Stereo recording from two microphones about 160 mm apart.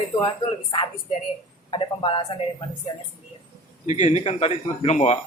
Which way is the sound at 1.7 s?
30° left (ahead or behind).